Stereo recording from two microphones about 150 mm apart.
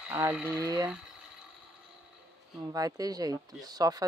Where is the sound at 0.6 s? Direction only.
20° right (ahead or behind).